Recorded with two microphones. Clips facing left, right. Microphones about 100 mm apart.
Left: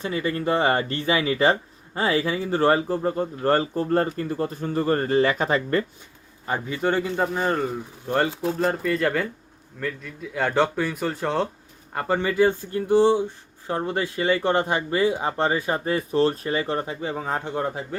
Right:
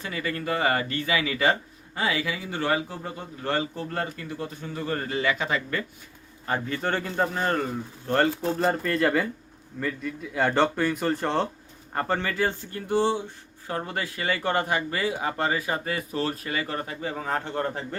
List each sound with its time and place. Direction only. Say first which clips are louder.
0.0 s speech: left 6 dB; 25° left (ahead or behind)
6.4 s a man's voice: left 3 dB; 15° left (ahead or behind)